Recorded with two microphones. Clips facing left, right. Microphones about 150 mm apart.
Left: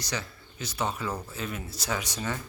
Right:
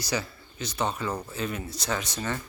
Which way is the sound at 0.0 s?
5° right (ahead or behind).